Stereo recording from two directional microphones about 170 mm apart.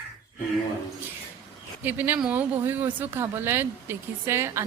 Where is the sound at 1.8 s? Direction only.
10° right (ahead or behind).